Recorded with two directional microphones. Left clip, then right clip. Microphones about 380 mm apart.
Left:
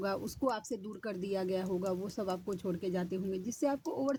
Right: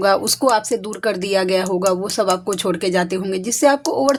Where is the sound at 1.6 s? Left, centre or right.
Left.